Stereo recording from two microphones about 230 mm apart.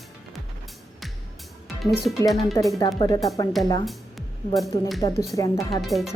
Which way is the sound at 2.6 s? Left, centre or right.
Centre.